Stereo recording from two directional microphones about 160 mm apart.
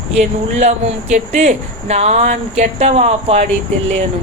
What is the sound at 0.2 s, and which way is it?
Speech, 45° right (ahead or behind).